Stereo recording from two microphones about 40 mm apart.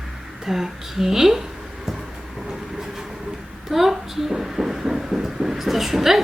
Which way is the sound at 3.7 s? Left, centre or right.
Centre.